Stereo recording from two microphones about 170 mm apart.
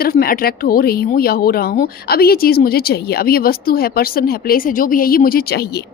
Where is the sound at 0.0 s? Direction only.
60° left (ahead or behind).